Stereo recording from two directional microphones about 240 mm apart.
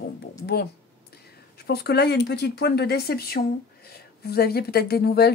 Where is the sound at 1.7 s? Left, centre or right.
Left.